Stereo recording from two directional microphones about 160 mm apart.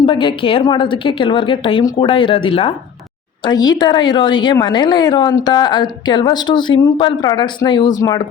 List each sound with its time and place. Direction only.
0.0 s a woman's voice: 30° left (ahead or behind)